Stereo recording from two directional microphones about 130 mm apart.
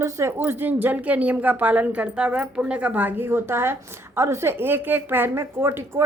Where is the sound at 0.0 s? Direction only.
20° right (ahead or behind).